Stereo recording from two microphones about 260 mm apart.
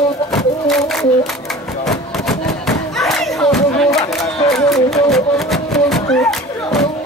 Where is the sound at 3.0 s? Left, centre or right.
Centre.